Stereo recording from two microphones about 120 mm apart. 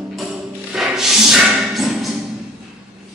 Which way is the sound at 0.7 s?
5° right (ahead or behind).